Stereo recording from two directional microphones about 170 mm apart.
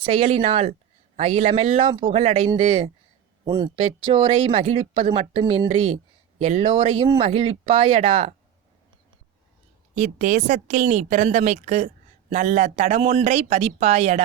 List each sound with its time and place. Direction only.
0.0 s speech: 35° right (ahead or behind)
3.4 s speech: 25° right (ahead or behind); by 8.4 s 40° right (ahead or behind)
9.9 s a woman's voice: 50° right (ahead or behind)